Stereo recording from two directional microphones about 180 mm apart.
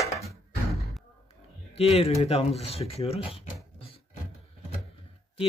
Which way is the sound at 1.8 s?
35° left (ahead or behind).